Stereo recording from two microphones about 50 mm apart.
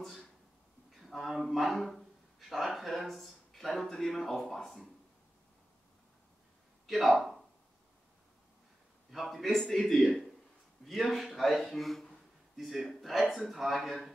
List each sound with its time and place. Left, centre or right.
0.0 s a sound: centre
1.0 s speech: centre
6.9 s speech: centre
9.1 s a man's voice: centre